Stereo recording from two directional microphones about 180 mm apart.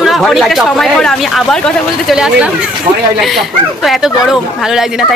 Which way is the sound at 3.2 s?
Centre (ahead or behind).